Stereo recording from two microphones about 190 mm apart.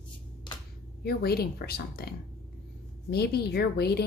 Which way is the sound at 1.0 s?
55° left (ahead or behind).